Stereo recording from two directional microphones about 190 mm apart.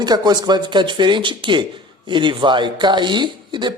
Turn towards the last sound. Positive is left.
turn(degrees=-25)  # may be behind; listen again after turning